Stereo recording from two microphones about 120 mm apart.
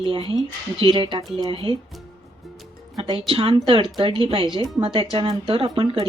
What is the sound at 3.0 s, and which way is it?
Speech, 45° right (ahead or behind).